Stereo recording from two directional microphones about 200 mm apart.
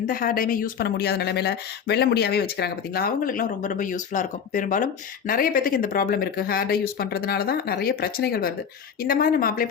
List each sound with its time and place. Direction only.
0.1 s speech: 45° left (ahead or behind)